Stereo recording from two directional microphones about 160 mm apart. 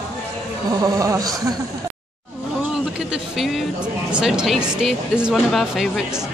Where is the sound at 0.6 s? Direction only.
25° right (ahead or behind).